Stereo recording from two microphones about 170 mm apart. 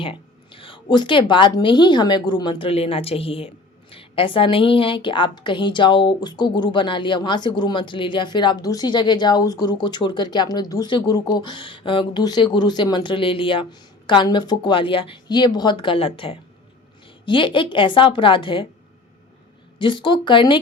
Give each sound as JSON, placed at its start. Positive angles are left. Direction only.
{"t": 0.0, "sound": "a woman's voice", "side_deg": 30}
{"t": 19.8, "sound": "a woman's voice", "side_deg": 30}